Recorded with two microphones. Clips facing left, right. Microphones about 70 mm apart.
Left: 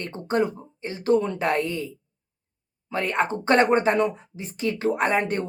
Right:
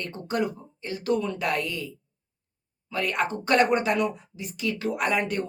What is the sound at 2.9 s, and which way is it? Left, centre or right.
Speech, left.